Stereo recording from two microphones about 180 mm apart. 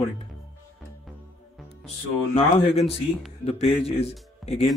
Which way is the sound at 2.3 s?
35° left (ahead or behind).